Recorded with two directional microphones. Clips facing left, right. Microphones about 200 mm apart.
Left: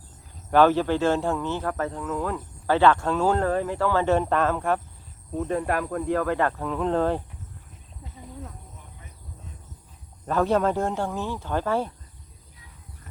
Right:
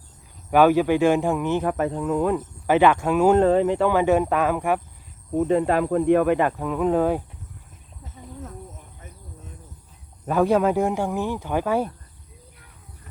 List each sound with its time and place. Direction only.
0.5 s speech: 10° right (ahead or behind)
10.2 s speech: 10° right (ahead or behind)